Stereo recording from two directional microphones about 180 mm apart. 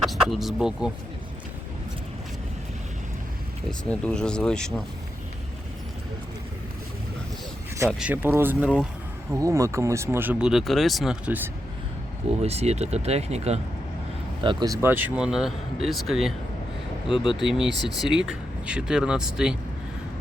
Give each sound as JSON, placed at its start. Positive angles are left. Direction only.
{"t": 0.0, "sound": "speech", "side_deg": 0}
{"t": 3.8, "sound": "speech", "side_deg": 5}
{"t": 7.9, "sound": "speech", "side_deg": -5}
{"t": 12.4, "sound": "speech", "side_deg": -35}
{"t": 14.4, "sound": "speech", "side_deg": -20}
{"t": 17.4, "sound": "speech", "side_deg": 0}